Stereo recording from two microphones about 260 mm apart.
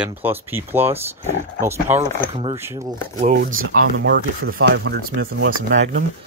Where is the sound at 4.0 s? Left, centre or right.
Right.